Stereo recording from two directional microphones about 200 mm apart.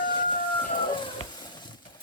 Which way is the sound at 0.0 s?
25° left (ahead or behind).